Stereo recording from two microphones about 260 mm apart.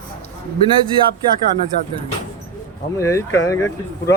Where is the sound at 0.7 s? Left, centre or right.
Centre.